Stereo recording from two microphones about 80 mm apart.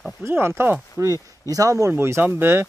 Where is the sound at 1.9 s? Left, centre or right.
Right.